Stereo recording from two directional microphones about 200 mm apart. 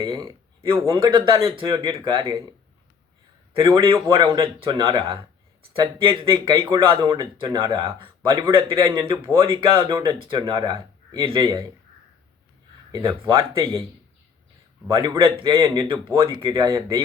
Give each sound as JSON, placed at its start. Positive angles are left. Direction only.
{"t": 0.0, "sound": "speech", "side_deg": -20}
{"t": 3.5, "sound": "a man's voice", "side_deg": -15}
{"t": 12.9, "sound": "speech", "side_deg": -25}
{"t": 14.8, "sound": "speech", "side_deg": -20}